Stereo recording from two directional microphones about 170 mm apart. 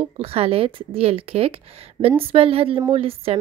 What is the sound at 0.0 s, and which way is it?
A woman's voice, 35° right (ahead or behind).